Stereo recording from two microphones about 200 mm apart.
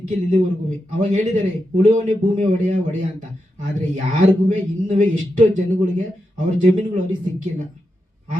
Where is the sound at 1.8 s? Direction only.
35° right (ahead or behind).